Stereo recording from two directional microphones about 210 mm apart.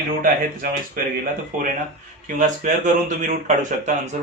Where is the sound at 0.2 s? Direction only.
40° right (ahead or behind).